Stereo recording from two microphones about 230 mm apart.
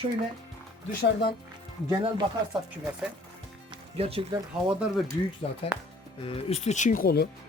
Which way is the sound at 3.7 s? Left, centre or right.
Right.